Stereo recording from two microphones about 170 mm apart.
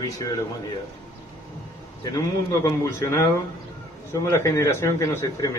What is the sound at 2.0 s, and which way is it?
A man's voice, 20° left (ahead or behind).